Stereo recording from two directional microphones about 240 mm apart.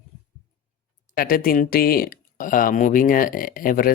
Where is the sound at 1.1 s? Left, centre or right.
Left.